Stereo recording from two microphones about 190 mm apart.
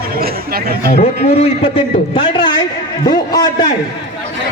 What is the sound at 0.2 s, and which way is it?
Speech, 50° right (ahead or behind).